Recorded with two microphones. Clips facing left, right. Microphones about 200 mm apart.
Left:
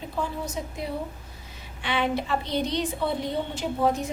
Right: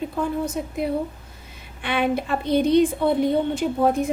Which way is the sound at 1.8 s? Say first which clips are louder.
Right 4 dB; 55° right (ahead or behind).